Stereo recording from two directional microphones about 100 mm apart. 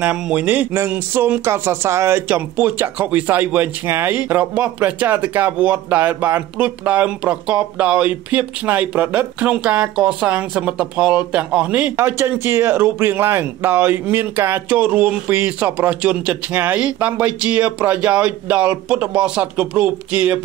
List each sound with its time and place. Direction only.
0.0 s speech: 15° right (ahead or behind)
12.0 s speech: 25° right (ahead or behind)